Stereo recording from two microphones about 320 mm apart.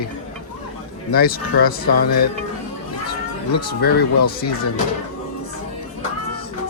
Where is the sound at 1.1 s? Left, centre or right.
Left.